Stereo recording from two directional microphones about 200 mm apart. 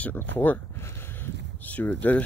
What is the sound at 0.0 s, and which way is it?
Speech, 10° left (ahead or behind).